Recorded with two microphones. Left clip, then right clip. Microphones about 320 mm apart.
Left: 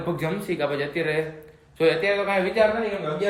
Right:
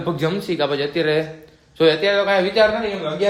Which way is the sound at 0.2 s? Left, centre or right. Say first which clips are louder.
Right 5 dB; centre.